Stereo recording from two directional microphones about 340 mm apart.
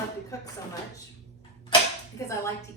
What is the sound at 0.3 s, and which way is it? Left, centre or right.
Speech, centre.